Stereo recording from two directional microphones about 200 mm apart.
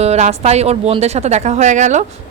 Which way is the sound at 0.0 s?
30° right (ahead or behind).